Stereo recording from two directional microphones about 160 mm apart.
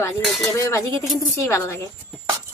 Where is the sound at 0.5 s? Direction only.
20° left (ahead or behind).